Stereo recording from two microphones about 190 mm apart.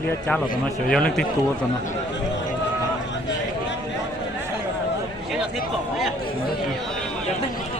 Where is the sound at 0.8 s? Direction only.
5° left (ahead or behind).